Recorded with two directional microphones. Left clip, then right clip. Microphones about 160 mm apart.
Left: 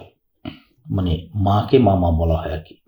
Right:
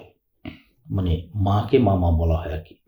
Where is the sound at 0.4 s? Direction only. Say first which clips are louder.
Left 5 dB; 40° left (ahead or behind).